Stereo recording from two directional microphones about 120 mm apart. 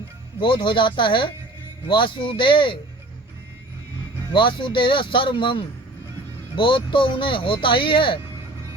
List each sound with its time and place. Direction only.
0.3 s speech: 45° left (ahead or behind)
4.3 s speech: 45° left (ahead or behind)